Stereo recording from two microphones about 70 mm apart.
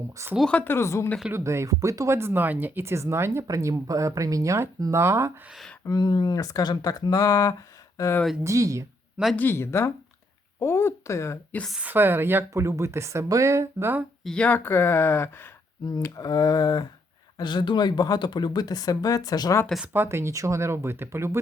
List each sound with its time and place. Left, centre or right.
0.2 s speech: right
0.6 s speech: left
1.3 s speech: right
3.4 s speech: right
5.9 s speech: left
8.4 s speech: right
9.3 s speech: left
9.6 s speech: left
11.8 s speech: right
14.3 s speech: centre
14.6 s speech: left
16.1 s speech: left
17.3 s speech: left
19.9 s speech: right